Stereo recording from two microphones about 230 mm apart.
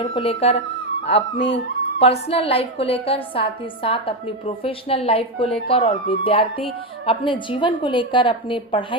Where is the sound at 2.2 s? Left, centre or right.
Left.